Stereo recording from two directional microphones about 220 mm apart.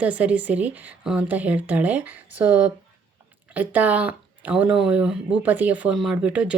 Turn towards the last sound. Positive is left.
turn(degrees=-5)  # may be behind; listen again after turning